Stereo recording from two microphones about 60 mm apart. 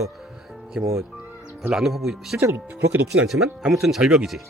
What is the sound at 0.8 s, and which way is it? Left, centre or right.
Speech, right.